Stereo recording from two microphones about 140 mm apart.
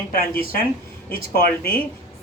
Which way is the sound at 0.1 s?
90° left.